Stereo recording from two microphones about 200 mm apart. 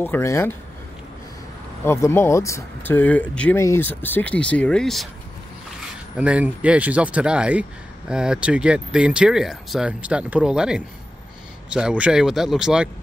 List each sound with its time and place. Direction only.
0.0 s speech: 10° left (ahead or behind)
1.9 s speech: 15° left (ahead or behind)
6.1 s speech: 5° right (ahead or behind)